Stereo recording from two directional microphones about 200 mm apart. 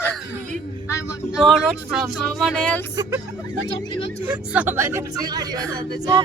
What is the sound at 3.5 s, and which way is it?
Speech, 20° left (ahead or behind).